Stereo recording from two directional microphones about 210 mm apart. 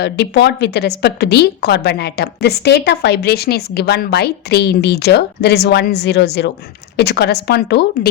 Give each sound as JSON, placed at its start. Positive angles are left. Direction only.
{"t": 0.0, "sound": "a woman's voice", "side_deg": 55}